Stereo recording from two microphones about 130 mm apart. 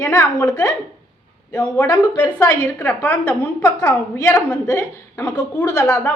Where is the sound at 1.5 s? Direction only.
10° left (ahead or behind).